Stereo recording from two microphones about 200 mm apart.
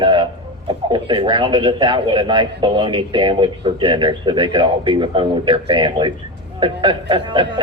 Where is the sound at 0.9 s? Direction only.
25° right (ahead or behind).